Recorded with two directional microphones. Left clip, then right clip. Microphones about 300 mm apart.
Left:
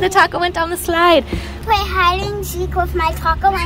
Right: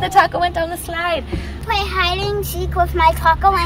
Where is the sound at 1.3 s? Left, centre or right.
Centre.